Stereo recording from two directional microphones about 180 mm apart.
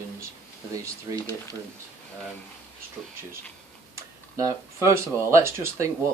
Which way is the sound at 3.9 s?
15° right (ahead or behind).